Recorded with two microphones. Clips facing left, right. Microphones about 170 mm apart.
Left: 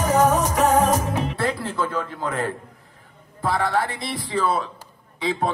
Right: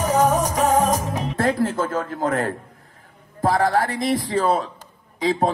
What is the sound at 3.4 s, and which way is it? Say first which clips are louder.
A man's voice: right 4 dB; 40° right (ahead or behind).